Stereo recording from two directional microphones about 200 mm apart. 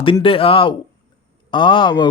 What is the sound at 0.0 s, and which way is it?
Speech, 25° left (ahead or behind).